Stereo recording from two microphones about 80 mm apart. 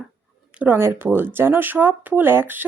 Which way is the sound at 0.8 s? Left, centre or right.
Right.